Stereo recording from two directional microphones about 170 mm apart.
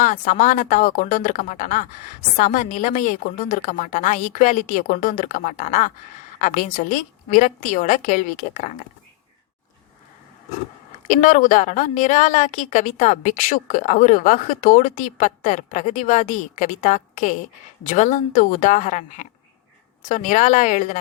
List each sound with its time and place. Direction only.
0.0 s a woman's voice: 45° left (ahead or behind)
11.1 s a woman's voice: 50° left (ahead or behind)